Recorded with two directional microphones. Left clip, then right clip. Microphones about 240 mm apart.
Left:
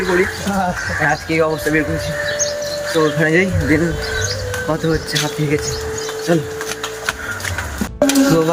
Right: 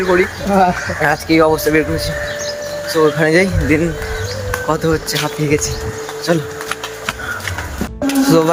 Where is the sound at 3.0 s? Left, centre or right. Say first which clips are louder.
Right 4 dB; centre.